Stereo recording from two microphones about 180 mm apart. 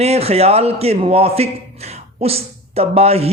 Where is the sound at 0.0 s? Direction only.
35° right (ahead or behind).